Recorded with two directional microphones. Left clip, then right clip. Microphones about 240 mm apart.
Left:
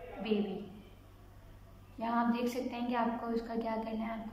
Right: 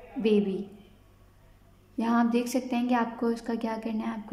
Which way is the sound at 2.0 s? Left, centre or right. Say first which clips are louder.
Right 6 dB; right.